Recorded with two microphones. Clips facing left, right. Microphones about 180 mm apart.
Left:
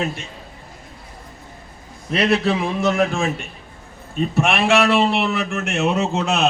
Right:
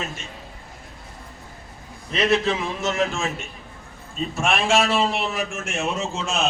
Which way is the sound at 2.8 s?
55° left (ahead or behind).